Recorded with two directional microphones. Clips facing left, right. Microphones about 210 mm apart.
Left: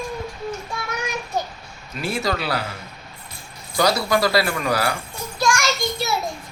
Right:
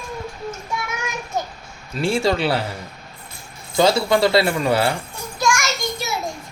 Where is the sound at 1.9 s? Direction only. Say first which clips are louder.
Right 5 dB; 30° right (ahead or behind).